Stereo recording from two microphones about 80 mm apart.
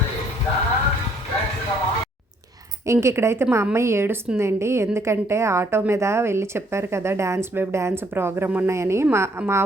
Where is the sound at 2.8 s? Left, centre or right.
Right.